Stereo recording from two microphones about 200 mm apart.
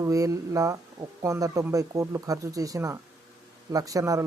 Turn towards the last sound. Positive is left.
turn(degrees=-15)  # may be behind; listen again after turning